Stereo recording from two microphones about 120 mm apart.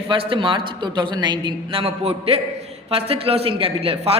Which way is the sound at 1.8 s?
55° right (ahead or behind).